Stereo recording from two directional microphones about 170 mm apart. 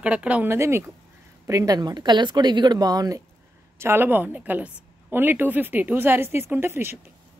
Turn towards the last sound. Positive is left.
turn(degrees=-15)  # may be behind; listen again after turning